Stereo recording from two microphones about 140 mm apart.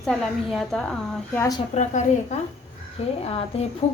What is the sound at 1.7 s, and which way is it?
Speech, 50° left (ahead or behind).